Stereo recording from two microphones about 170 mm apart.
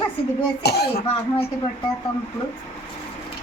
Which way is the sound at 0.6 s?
70° left (ahead or behind).